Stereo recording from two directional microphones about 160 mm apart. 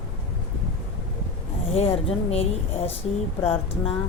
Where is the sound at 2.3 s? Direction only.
40° left (ahead or behind).